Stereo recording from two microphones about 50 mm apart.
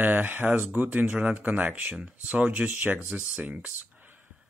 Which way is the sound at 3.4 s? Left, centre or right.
Right.